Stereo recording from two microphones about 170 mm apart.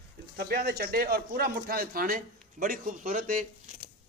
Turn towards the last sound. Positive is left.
turn(degrees=-50)  # may be behind; listen again after turning